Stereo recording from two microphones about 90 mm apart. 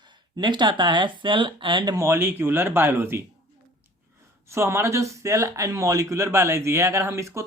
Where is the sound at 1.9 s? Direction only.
35° right (ahead or behind).